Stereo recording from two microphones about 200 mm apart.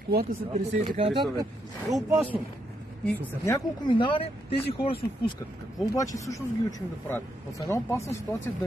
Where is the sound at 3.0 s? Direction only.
10° left (ahead or behind); by 5.0 s 25° left (ahead or behind).